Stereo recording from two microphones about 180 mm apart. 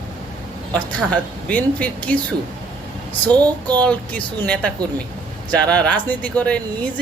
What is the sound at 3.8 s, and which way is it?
Speech, 5° left (ahead or behind).